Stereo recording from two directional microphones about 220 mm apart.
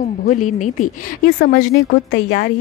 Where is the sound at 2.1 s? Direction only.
50° left (ahead or behind).